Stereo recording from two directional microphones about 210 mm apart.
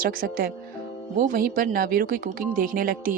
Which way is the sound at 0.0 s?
45° right (ahead or behind).